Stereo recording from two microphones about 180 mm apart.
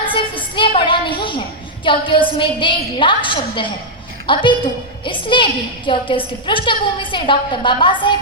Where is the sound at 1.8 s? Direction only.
25° left (ahead or behind).